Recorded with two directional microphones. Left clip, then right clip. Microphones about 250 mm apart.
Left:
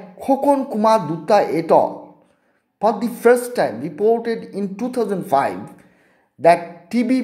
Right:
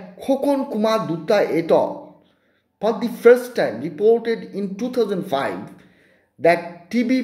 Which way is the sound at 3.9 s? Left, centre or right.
Left.